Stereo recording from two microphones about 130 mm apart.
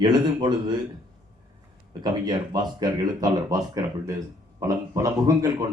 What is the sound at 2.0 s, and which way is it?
Speech, 30° right (ahead or behind).